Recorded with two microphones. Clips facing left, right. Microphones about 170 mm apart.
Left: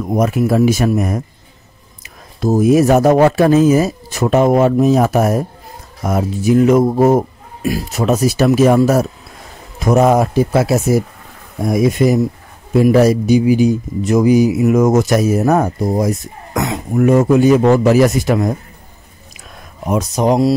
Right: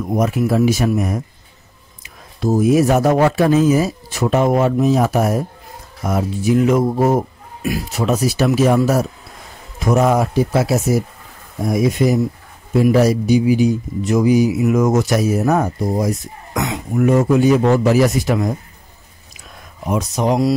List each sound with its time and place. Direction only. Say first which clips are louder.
0.1 s speech: left 3 dB; 45° left (ahead or behind)
19.9 s speech: left 3 dB; 40° left (ahead or behind)